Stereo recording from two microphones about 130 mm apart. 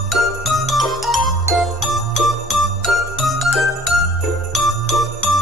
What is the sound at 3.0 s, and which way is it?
Jingle, centre (ahead or behind).